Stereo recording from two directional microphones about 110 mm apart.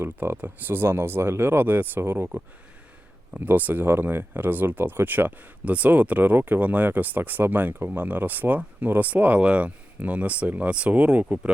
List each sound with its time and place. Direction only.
0.0 s speech: 20° right (ahead or behind)